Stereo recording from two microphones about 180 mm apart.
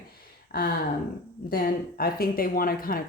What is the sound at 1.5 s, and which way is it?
Speech, 55° left (ahead or behind).